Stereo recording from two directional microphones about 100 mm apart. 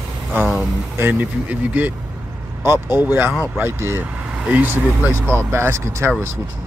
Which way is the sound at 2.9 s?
20° right (ahead or behind).